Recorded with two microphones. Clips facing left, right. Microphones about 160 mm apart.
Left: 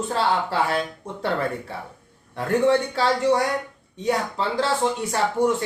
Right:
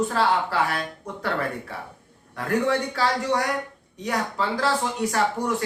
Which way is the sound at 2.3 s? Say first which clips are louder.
Left 4 dB; 25° left (ahead or behind).